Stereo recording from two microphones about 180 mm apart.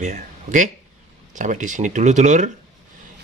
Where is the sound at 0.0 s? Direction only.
45° right (ahead or behind).